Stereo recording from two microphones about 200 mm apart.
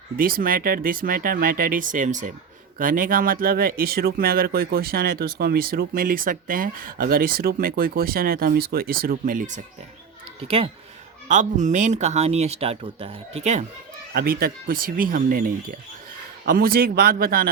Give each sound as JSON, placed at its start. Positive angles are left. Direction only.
{"t": 0.2, "sound": "speech", "side_deg": -45}
{"t": 10.5, "sound": "speech", "side_deg": -30}
{"t": 14.1, "sound": "speech", "side_deg": -50}